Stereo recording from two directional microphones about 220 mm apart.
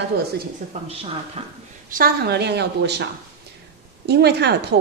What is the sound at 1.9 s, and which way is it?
Speech, 45° right (ahead or behind).